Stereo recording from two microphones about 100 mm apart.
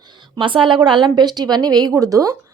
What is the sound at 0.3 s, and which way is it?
A woman's voice, 55° right (ahead or behind).